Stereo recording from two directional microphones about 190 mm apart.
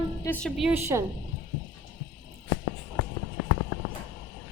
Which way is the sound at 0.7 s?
15° right (ahead or behind).